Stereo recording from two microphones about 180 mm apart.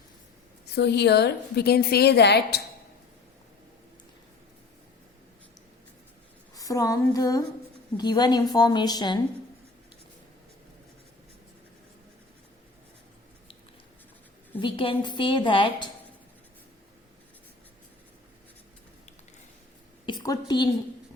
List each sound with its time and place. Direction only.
0.8 s a woman's voice: 70° left (ahead or behind)
6.6 s a woman's voice: 20° left (ahead or behind)
14.6 s a woman's voice: 30° left (ahead or behind)
20.1 s a woman's voice: 20° left (ahead or behind)